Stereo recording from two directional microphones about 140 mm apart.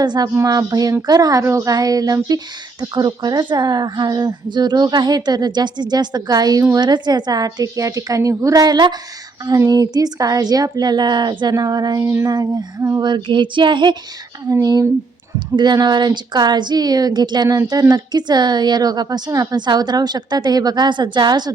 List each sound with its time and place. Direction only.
0.0 s speech: 30° right (ahead or behind)